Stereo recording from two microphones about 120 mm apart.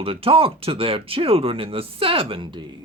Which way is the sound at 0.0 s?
50° right (ahead or behind).